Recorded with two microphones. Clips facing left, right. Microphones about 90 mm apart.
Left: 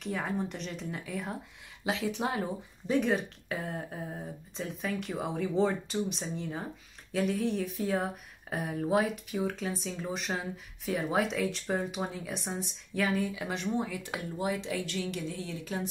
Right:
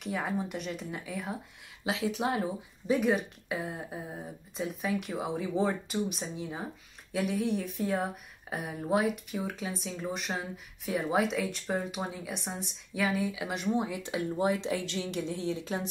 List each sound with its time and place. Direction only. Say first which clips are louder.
0.0 s speech: even; 5° right (ahead or behind); by 15.9 s 25° right (ahead or behind)